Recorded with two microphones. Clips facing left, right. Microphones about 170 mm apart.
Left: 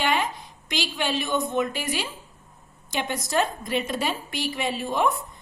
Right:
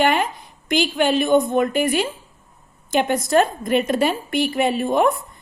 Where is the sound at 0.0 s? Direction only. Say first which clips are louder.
Right 6 dB; 50° right (ahead or behind).